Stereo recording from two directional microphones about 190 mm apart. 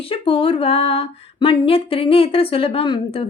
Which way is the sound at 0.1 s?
30° left (ahead or behind).